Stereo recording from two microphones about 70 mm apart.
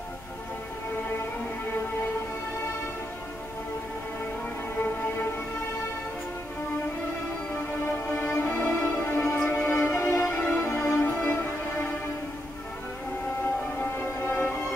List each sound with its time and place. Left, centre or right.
4.7 s music: left
7.8 s music: left
13.9 s music: left